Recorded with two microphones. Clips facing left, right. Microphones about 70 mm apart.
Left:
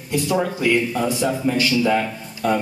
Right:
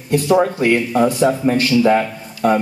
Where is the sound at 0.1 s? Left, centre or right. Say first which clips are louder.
Right 6 dB; right.